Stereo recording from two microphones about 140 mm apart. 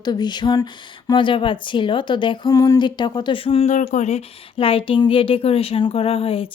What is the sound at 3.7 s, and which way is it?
Speech, 60° left (ahead or behind).